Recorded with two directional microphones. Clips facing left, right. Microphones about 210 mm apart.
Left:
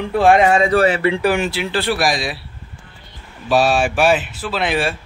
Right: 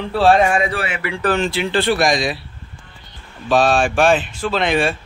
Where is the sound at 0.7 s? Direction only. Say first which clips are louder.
Left 9 dB; 40° left (ahead or behind).